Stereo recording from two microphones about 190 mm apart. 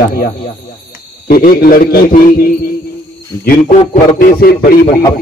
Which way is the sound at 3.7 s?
35° left (ahead or behind).